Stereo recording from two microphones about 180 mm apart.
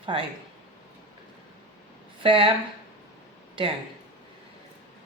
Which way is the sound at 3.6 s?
25° right (ahead or behind).